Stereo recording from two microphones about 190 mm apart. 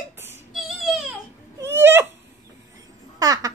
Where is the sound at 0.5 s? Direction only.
Centre (ahead or behind).